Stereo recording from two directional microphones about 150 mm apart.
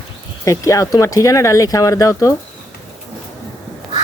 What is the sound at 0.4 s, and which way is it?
Speech, 20° left (ahead or behind).